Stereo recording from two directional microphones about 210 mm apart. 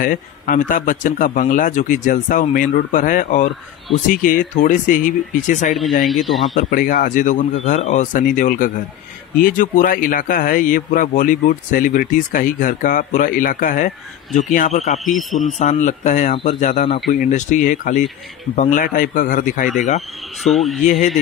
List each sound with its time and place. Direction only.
0.0 s speech: 40° left (ahead or behind)
6.0 s speech: centre (ahead or behind)
6.5 s speech: 40° left (ahead or behind)
20.4 s speech: centre (ahead or behind)